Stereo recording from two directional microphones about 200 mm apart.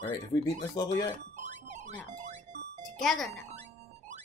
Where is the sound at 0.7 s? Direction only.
20° left (ahead or behind).